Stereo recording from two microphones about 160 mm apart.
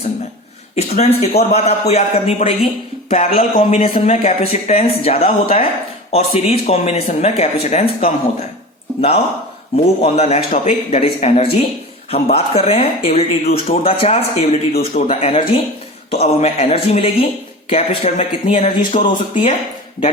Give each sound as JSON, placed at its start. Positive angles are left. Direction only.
{"t": 0.8, "sound": "a man's voice", "side_deg": 40}
{"t": 3.3, "sound": "speech", "side_deg": 55}
{"t": 3.8, "sound": "speech", "side_deg": 35}